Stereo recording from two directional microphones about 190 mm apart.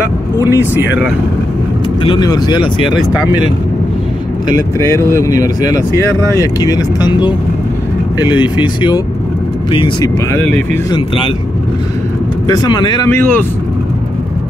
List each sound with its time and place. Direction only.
0.5 s speech: 10° right (ahead or behind)
2.0 s speech: 20° left (ahead or behind)
5.1 s speech: 15° left (ahead or behind)
12.4 s speech: 20° left (ahead or behind)